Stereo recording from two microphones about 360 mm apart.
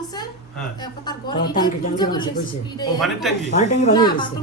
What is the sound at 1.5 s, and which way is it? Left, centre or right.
Speech, centre.